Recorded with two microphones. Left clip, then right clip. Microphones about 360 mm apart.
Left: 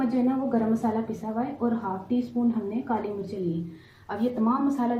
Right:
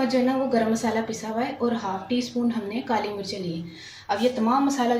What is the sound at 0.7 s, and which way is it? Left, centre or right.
A woman's voice, right.